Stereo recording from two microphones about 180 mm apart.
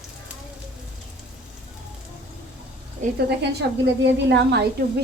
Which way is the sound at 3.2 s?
65° right (ahead or behind).